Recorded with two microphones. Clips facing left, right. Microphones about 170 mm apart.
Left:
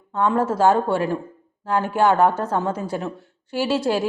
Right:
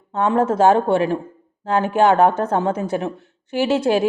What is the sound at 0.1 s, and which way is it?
Speech, 20° right (ahead or behind).